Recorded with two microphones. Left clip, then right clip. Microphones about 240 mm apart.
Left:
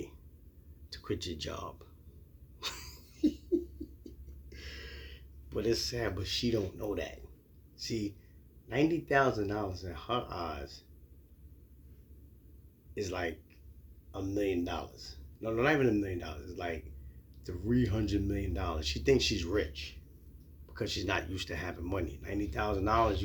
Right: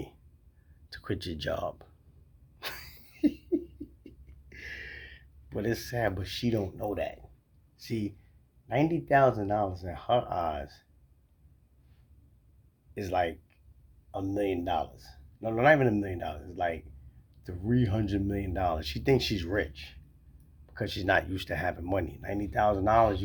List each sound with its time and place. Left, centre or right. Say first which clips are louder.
0.9 s speech: right 2 dB; right
2.6 s a sound: right 1 dB; right
5.5 s a man's voice: right 1 dB; right
12.9 s a man's voice: right 7 dB; right